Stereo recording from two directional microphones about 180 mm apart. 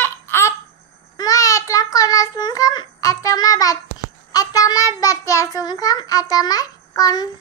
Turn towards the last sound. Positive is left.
turn(degrees=20)  # may be behind; listen again after turning